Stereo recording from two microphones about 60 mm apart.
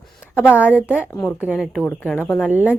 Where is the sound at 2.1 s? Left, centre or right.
Left.